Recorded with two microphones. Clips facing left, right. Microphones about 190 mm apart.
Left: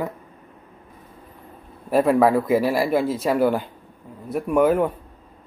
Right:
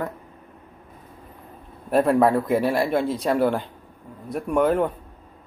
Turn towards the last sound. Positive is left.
turn(degrees=5)  # may be behind; listen again after turning